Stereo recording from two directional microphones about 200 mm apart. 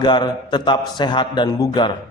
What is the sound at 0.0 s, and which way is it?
A man's voice, 20° left (ahead or behind).